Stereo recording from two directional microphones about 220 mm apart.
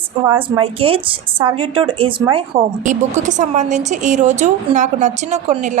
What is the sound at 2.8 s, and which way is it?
A woman's voice, 35° right (ahead or behind).